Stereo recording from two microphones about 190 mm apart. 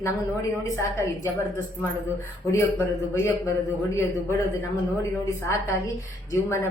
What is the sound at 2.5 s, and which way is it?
A woman's voice, 10° left (ahead or behind).